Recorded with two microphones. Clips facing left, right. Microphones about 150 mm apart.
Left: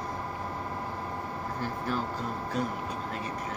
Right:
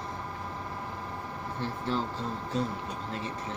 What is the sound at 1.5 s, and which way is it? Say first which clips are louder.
Speech: right 1 dB; 25° right (ahead or behind).